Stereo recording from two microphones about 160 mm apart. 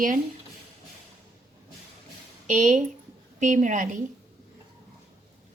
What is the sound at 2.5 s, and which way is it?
A woman's voice, 50° right (ahead or behind).